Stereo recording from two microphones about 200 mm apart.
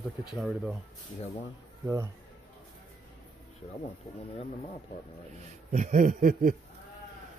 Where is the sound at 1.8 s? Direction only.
15° right (ahead or behind).